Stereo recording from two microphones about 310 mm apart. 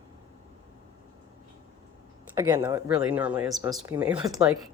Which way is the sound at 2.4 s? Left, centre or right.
Centre.